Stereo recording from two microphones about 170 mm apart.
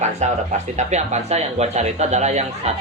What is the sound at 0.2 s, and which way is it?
Speech, 40° right (ahead or behind).